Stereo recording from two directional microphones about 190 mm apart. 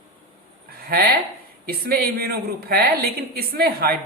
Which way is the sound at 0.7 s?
50° right (ahead or behind).